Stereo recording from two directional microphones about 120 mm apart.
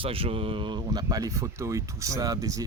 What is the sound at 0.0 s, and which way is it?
Speech, 50° right (ahead or behind).